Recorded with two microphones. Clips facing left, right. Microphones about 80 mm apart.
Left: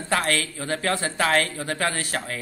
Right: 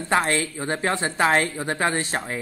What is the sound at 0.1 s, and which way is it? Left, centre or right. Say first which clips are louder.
Speech: right 2 dB; right.